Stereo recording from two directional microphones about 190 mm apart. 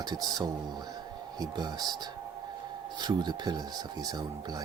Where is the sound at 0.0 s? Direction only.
20° right (ahead or behind).